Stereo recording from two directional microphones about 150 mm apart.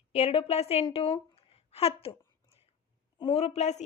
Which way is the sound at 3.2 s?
40° left (ahead or behind).